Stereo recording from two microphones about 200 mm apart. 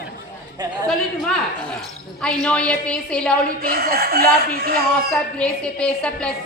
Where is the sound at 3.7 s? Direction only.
50° right (ahead or behind).